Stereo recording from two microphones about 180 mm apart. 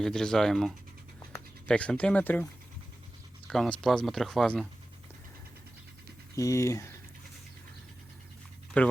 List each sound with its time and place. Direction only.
0.0 s speech: 5° left (ahead or behind)
6.3 s speech: 15° left (ahead or behind)
8.7 s speech: 10° left (ahead or behind)